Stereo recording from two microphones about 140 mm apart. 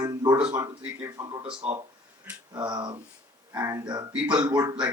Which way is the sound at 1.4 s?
40° right (ahead or behind).